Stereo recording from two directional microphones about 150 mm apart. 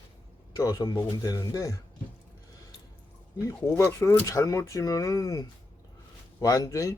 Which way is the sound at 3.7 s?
15° left (ahead or behind).